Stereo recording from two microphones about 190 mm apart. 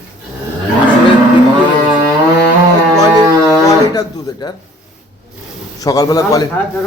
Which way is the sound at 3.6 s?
20° left (ahead or behind).